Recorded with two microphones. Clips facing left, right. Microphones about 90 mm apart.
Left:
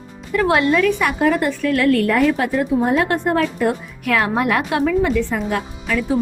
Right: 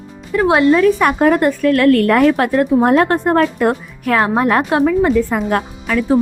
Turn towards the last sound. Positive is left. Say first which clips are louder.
# right 4 dB
turn(degrees=-50)  # may be behind; listen again after turning